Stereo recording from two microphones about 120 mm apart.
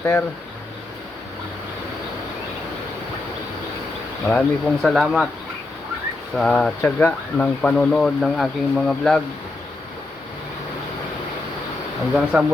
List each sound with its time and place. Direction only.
0.0 s speech: 20° left (ahead or behind)
4.3 s speech: 10° left (ahead or behind)
6.3 s speech: 5° left (ahead or behind)
12.1 s speech: 10° right (ahead or behind)